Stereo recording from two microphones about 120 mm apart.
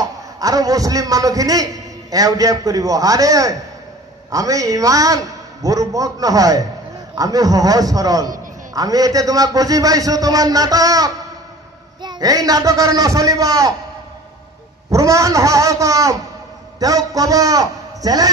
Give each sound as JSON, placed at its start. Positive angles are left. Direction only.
{"t": 0.0, "sound": "a man's voice", "side_deg": -30}
{"t": 14.9, "sound": "a man's voice", "side_deg": -25}